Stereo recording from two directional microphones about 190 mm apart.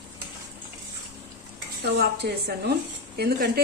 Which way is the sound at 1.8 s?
60° right (ahead or behind).